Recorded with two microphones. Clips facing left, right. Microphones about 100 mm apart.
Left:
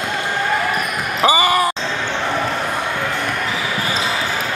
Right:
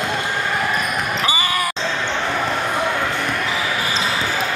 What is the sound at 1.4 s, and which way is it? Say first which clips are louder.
Basketball bounce: left 6 dB; 25° left (ahead or behind).